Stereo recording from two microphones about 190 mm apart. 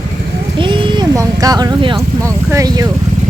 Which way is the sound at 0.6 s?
25° right (ahead or behind).